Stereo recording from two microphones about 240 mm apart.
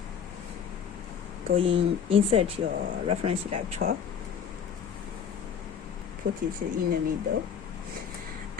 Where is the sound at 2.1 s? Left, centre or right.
Right.